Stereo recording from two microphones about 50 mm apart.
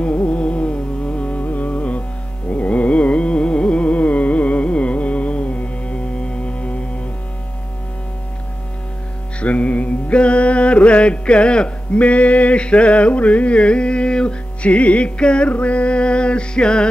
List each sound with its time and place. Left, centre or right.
0.0 s music: left
2.5 s carnatic music: left
9.4 s mantra: left